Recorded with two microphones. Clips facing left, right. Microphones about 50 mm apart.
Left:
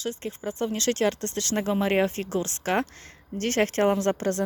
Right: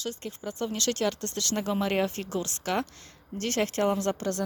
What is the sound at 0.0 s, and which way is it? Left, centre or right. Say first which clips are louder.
Speech: left 4 dB; left.